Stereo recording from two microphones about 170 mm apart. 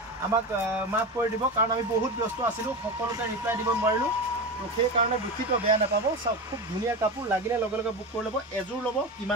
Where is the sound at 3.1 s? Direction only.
20° right (ahead or behind).